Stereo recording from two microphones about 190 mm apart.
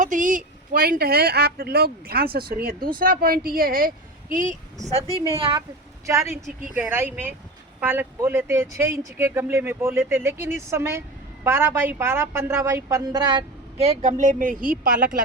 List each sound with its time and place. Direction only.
0.0 s speech: 40° right (ahead or behind)
5.4 s a woman's voice: 25° right (ahead or behind); by 14.9 s 45° right (ahead or behind)